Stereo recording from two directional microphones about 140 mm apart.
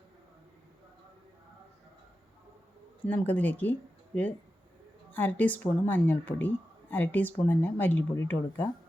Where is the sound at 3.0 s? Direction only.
10° left (ahead or behind).